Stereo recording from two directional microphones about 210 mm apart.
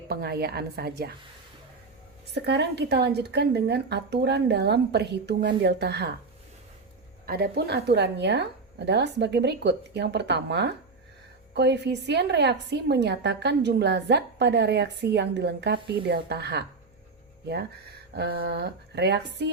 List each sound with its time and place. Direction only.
0.1 s a woman's voice: 50° right (ahead or behind)
2.3 s a woman's voice: 55° right (ahead or behind)
7.3 s a woman's voice: 50° right (ahead or behind)
18.1 s a woman's voice: 50° right (ahead or behind)